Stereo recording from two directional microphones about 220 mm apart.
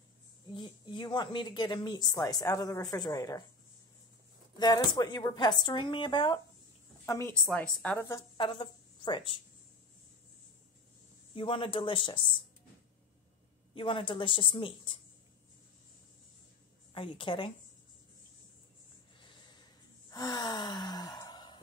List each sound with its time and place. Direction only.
0.5 s a woman's voice: 20° left (ahead or behind)
4.6 s a woman's voice: 20° left (ahead or behind)
8.4 s a woman's voice: 25° left (ahead or behind)
11.3 s speech: 25° left (ahead or behind)
13.7 s speech: 25° left (ahead or behind)
16.9 s speech: 25° left (ahead or behind)
19.1 s snort: 20° left (ahead or behind)
20.1 s gasp: 15° left (ahead or behind)